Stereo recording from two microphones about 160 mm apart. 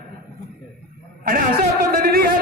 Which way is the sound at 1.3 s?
65° right (ahead or behind).